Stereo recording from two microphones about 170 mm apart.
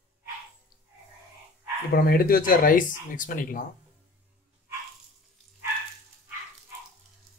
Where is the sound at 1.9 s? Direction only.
60° left (ahead or behind).